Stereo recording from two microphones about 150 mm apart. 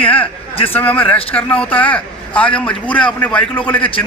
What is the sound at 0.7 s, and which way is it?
A man's voice, 10° left (ahead or behind).